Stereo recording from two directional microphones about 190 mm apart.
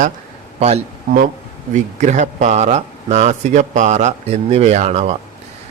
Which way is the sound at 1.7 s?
40° right (ahead or behind).